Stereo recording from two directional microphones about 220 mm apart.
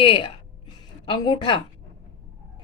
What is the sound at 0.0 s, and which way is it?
Speech, 25° left (ahead or behind).